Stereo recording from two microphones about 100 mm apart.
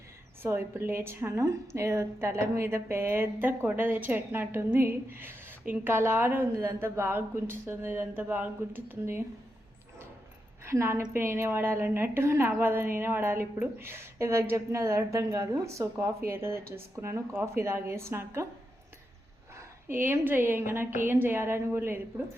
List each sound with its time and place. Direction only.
0.4 s a woman's voice: 20° right (ahead or behind)
10.7 s a woman's voice: 25° right (ahead or behind)
19.5 s a woman's voice: 20° right (ahead or behind)